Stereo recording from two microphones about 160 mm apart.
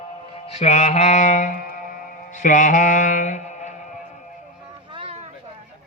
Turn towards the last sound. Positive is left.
turn(degrees=-35)  # may be behind; listen again after turning